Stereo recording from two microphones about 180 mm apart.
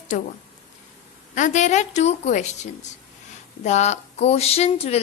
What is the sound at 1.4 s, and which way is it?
A woman's voice, 45° left (ahead or behind).